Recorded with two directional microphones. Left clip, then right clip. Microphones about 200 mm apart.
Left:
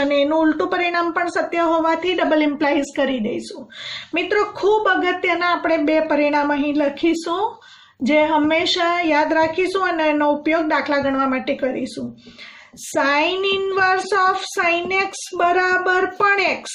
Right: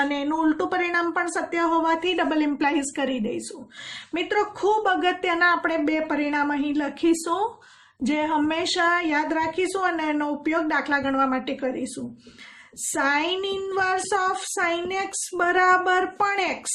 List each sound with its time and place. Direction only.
0.1 s a woman's voice: 45° right (ahead or behind)
12.9 s a woman's voice: 45° right (ahead or behind)